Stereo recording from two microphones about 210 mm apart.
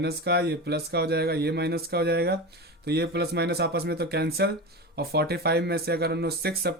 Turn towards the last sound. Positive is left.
turn(degrees=-50)  # may be behind; listen again after turning